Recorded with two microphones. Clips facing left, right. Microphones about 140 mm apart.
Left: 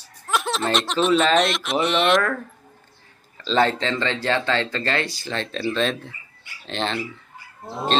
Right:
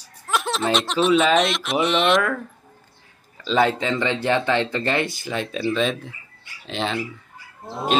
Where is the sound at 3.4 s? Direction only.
5° right (ahead or behind).